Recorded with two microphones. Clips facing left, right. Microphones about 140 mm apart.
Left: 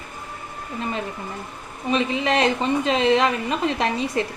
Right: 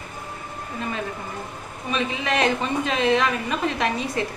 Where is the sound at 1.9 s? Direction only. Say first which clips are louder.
Left 4 dB; 25° left (ahead or behind).